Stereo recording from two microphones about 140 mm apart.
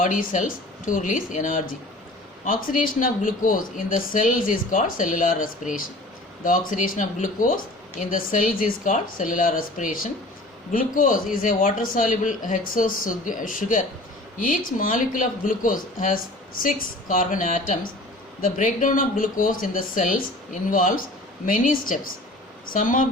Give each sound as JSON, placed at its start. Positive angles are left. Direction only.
{"t": 0.0, "sound": "speech", "side_deg": 70}